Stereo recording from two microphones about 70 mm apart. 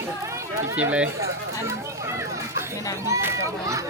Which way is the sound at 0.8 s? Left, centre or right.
Centre.